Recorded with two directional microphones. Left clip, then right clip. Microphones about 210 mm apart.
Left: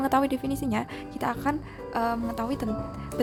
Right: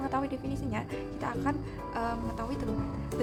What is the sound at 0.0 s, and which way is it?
A woman's voice, 45° left (ahead or behind).